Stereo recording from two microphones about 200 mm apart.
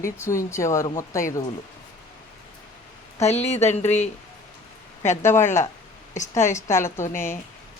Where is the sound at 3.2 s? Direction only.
35° left (ahead or behind).